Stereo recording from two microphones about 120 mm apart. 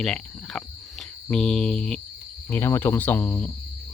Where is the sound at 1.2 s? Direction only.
5° left (ahead or behind).